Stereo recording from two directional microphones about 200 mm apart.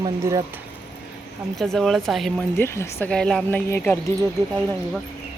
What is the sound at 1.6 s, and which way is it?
Speech, centre (ahead or behind).